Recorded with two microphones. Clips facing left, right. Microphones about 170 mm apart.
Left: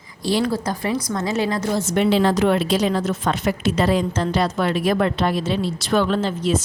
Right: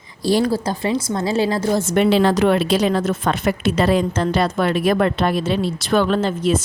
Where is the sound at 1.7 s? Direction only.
55° right (ahead or behind).